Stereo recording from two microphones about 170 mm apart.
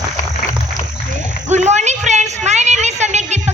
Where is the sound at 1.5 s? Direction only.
45° right (ahead or behind).